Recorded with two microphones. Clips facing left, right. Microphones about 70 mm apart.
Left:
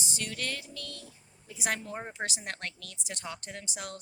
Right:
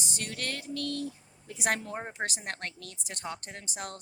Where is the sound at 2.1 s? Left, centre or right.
Right.